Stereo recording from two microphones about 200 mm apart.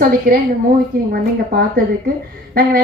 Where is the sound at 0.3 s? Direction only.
45° right (ahead or behind).